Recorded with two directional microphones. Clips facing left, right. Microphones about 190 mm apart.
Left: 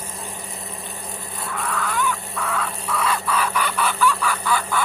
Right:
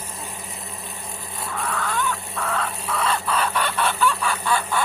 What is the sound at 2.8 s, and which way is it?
Chicken, centre (ahead or behind).